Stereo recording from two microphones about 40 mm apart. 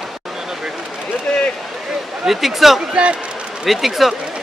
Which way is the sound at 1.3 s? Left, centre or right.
Centre.